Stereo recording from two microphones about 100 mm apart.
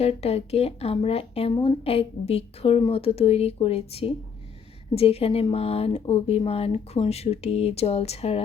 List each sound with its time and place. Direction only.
0.0 s a woman's voice: 90° left